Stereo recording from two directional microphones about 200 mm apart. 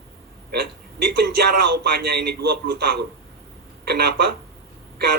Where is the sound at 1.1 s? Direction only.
55° right (ahead or behind).